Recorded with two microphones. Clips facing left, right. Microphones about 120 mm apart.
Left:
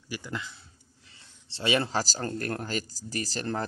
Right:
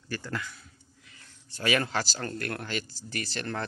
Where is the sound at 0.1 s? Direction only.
15° left (ahead or behind).